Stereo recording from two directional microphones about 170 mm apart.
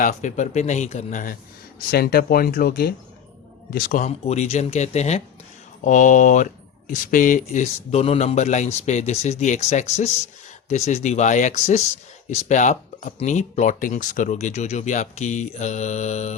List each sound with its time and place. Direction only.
0.0 s speech: 45° left (ahead or behind)
1.9 s speech: 65° left (ahead or behind)
4.0 s speech: 40° left (ahead or behind)